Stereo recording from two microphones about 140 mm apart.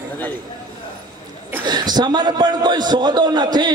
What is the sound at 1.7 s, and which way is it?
A man's voice, 30° right (ahead or behind).